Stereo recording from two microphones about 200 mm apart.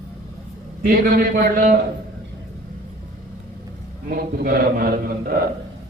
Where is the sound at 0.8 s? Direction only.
45° right (ahead or behind).